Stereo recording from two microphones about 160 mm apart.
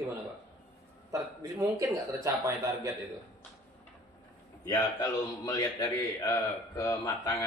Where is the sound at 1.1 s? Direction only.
20° right (ahead or behind).